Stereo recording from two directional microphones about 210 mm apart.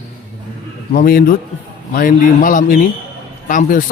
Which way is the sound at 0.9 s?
45° left (ahead or behind).